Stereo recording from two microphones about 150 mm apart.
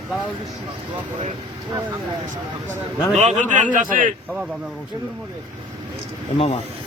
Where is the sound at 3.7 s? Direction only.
60° right (ahead or behind).